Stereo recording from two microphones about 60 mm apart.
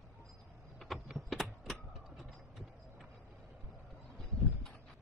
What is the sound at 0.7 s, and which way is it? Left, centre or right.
Power windows, centre.